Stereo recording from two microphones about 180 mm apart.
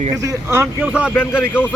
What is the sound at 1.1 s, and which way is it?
Speech, 10° left (ahead or behind).